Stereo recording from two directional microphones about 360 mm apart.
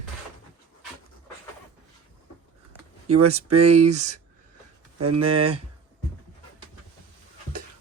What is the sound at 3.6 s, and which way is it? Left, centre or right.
Speech, right.